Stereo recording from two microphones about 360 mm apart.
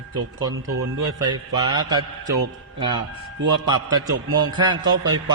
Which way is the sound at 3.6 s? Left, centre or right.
Centre.